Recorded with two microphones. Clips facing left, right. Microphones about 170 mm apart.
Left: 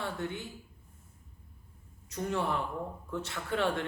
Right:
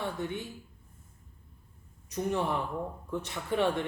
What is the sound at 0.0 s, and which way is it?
Speech, 15° right (ahead or behind).